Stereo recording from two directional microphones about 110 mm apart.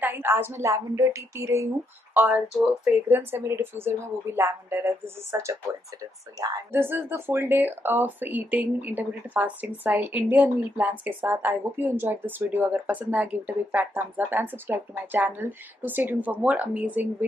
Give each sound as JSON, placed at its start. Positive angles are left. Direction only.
{"t": 0.0, "sound": "speech", "side_deg": -20}
{"t": 2.1, "sound": "speech", "side_deg": -15}
{"t": 3.1, "sound": "speech", "side_deg": -20}